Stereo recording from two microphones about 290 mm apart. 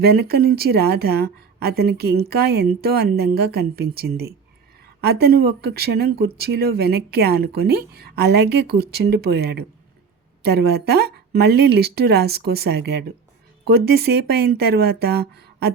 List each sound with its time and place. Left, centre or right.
0.0 s speech: right